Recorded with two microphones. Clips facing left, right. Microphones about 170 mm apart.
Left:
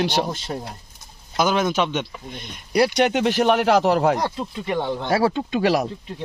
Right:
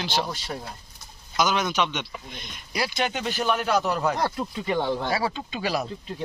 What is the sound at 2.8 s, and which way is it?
Speech, 70° left (ahead or behind).